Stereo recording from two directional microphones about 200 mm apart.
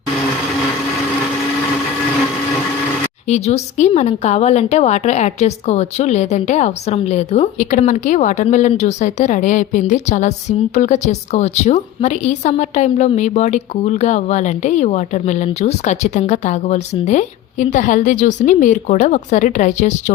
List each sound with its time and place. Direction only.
3.2 s a woman's voice: 35° left (ahead or behind)